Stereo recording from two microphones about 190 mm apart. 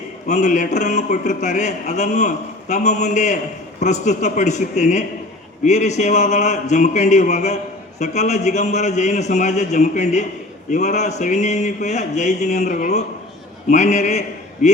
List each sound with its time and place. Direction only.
0.3 s a man's voice: 40° left (ahead or behind)